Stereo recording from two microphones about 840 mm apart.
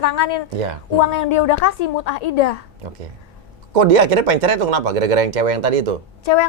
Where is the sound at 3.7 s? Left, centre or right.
Right.